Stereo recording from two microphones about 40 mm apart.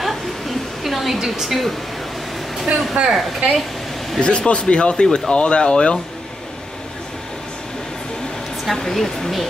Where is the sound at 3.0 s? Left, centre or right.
Right.